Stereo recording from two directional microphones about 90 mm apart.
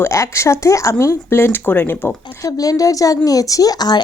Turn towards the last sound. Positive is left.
turn(degrees=50)  # may be behind; listen again after turning